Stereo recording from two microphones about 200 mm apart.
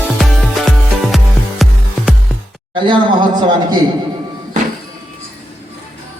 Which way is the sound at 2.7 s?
25° right (ahead or behind).